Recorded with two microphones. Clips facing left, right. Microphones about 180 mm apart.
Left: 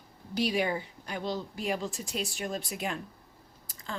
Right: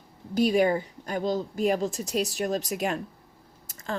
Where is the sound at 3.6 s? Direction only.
45° right (ahead or behind).